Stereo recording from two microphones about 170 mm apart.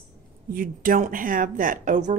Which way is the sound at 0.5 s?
55° right (ahead or behind).